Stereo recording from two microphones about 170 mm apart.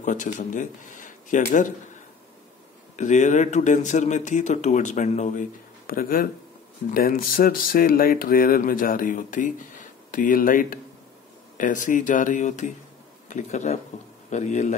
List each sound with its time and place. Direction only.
0.0 s speech: 45° left (ahead or behind)
3.0 s speech: 45° left (ahead or behind)